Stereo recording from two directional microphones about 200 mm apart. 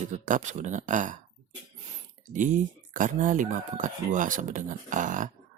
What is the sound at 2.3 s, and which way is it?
Speech, 40° right (ahead or behind).